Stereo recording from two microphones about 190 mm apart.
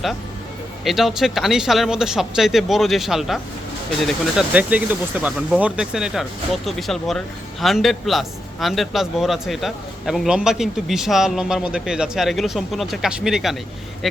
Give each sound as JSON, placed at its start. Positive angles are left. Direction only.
{"t": 0.9, "sound": "a man's voice", "side_deg": 0}